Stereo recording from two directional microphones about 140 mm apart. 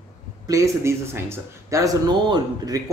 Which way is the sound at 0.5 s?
20° right (ahead or behind).